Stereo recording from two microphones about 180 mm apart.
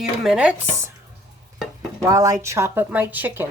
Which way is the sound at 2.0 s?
20° right (ahead or behind).